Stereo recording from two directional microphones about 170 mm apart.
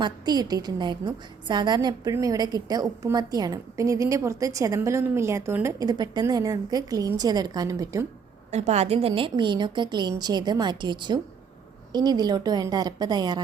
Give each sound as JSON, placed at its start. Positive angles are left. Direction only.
{"t": 0.0, "sound": "a woman's voice", "side_deg": -25}
{"t": 8.4, "sound": "a woman's voice", "side_deg": -40}